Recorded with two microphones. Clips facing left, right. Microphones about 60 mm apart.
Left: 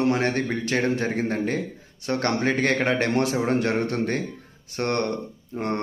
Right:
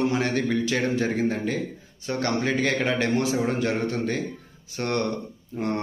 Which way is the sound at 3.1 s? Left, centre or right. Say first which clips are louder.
Left 2 dB; left.